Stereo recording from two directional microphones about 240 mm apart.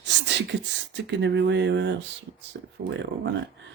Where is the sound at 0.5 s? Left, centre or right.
Right.